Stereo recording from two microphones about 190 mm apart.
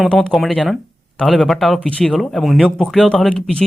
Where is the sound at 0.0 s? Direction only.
Centre (ahead or behind).